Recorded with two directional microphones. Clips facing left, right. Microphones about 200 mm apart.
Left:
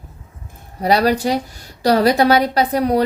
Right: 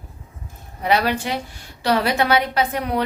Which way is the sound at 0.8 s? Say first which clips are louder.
Left 5 dB; 40° left (ahead or behind).